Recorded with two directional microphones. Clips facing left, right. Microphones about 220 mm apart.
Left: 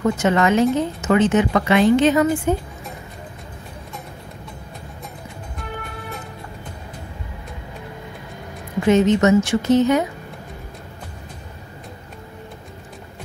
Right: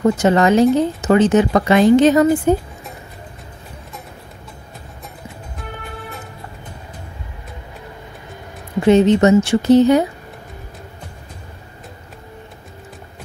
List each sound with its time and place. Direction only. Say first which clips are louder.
0.0 s a woman's voice: right 4 dB; 35° right (ahead or behind)
8.8 s a woman's voice: right 3 dB; 35° right (ahead or behind)